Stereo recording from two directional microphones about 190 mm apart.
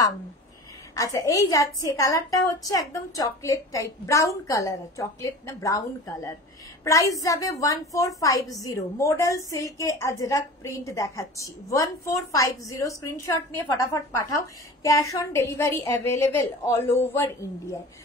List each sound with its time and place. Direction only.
0.9 s a woman's voice: 15° left (ahead or behind)